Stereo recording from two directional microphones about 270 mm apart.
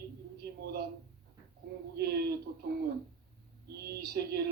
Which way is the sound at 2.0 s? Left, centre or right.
Right.